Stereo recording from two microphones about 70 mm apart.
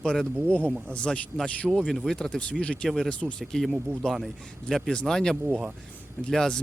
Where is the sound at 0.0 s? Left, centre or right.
Centre.